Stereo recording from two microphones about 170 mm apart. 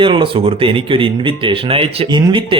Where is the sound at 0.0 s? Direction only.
30° right (ahead or behind).